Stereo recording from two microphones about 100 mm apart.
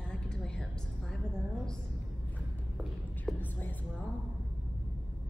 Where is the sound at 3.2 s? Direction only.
15° left (ahead or behind).